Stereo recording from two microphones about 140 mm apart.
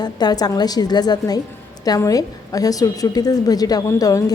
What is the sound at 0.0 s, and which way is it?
A woman's voice, 30° left (ahead or behind).